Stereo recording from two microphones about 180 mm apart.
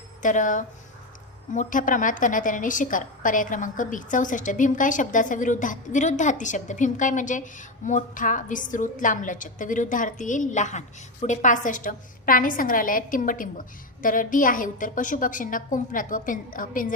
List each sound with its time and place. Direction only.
0.2 s a woman's voice: 45° left (ahead or behind)